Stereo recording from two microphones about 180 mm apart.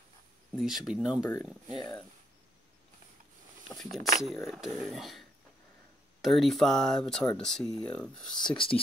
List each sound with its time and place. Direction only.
0.6 s speech: centre (ahead or behind)
1.7 s speech: 25° left (ahead or behind)
3.6 s speech: centre (ahead or behind)
6.2 s speech: centre (ahead or behind)
8.3 s speech: 25° left (ahead or behind)